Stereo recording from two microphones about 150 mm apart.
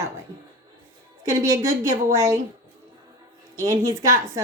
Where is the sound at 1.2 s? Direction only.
20° right (ahead or behind).